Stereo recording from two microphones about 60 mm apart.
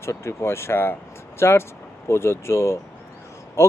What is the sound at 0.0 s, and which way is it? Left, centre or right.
Speech, left.